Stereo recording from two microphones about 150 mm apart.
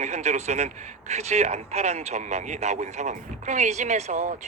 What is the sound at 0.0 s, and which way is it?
A man's voice, 50° right (ahead or behind).